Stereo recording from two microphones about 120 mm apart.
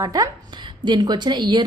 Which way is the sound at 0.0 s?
30° right (ahead or behind).